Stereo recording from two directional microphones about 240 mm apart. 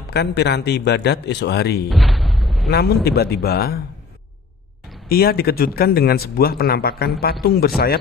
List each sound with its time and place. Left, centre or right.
0.1 s speech: left
1.9 s a sound: centre
2.7 s speech: left
5.0 s speech: left